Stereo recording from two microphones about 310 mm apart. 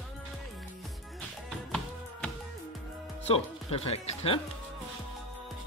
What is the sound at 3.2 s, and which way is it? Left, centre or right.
Speech, centre.